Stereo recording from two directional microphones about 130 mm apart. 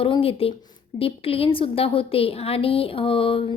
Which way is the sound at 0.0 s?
45° left (ahead or behind).